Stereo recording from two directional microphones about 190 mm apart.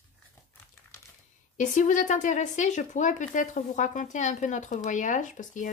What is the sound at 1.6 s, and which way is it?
Speech, 40° left (ahead or behind).